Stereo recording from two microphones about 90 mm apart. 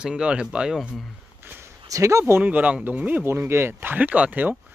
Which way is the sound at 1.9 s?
35° right (ahead or behind).